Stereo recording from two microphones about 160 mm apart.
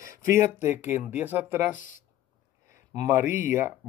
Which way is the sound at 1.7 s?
55° left (ahead or behind).